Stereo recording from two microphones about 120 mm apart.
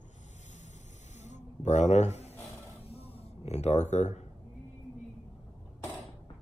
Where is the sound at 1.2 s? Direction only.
80° left.